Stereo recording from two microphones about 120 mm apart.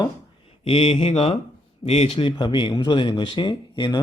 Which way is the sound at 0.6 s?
55° left (ahead or behind).